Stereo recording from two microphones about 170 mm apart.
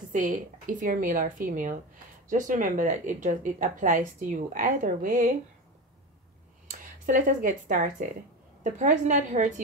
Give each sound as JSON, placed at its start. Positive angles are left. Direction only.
{"t": 0.1, "sound": "speech", "side_deg": -50}
{"t": 6.7, "sound": "speech", "side_deg": -50}